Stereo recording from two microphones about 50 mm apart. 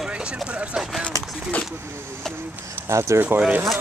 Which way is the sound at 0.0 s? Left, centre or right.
Right.